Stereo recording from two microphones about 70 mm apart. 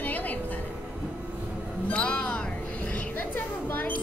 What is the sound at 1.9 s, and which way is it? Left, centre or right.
Speech, centre.